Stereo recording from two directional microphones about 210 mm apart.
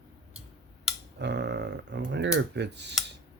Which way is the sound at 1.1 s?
55° right (ahead or behind).